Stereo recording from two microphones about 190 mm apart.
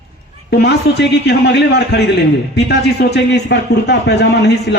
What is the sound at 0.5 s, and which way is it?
Speech, 60° left (ahead or behind).